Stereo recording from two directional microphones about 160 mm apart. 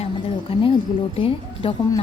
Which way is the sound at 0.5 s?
35° left (ahead or behind).